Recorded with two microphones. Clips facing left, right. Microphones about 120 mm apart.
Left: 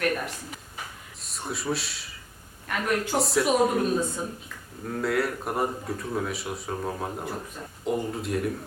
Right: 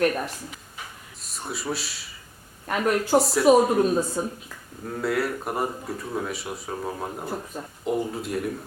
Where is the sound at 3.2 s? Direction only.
Centre (ahead or behind).